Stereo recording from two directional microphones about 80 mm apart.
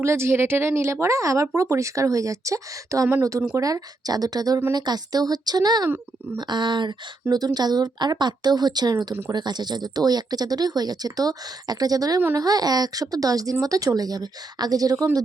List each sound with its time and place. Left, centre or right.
0.0 s speech: right
6.5 s speech: right